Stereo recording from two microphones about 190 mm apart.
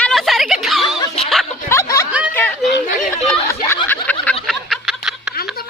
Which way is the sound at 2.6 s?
Centre (ahead or behind).